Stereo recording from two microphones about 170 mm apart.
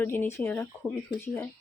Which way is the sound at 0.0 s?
10° left (ahead or behind).